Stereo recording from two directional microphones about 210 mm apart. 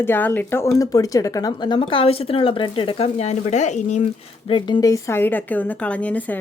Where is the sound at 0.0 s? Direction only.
10° left (ahead or behind).